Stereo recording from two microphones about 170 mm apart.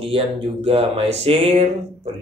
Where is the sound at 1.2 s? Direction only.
35° right (ahead or behind).